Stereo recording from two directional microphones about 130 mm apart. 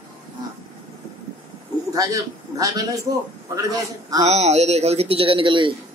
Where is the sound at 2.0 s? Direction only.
25° right (ahead or behind).